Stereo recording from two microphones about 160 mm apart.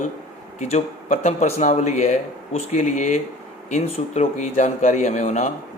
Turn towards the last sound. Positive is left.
turn(degrees=50)  # may be behind; listen again after turning